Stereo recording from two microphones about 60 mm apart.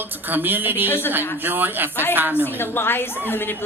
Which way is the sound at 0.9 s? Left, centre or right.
Left.